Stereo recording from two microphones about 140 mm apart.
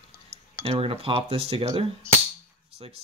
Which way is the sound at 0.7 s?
40° right (ahead or behind).